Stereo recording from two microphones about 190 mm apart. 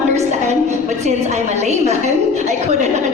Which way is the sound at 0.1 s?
35° right (ahead or behind).